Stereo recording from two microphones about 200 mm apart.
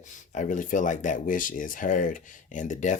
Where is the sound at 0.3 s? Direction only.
40° left (ahead or behind).